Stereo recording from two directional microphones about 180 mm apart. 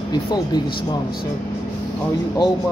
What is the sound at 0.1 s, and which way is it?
Speech, 20° left (ahead or behind).